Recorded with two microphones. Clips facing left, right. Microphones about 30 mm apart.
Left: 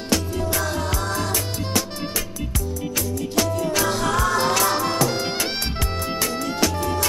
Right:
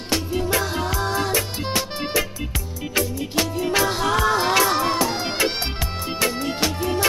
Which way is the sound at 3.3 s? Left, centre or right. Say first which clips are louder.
Right 1 dB; right.